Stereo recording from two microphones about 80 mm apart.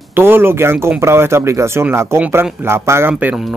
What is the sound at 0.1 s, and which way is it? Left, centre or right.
Speech, right.